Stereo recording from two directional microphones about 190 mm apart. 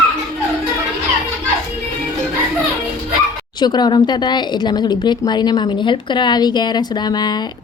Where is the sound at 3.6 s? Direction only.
20° left (ahead or behind).